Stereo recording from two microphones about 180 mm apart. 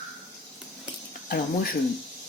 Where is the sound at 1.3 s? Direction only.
55° left (ahead or behind).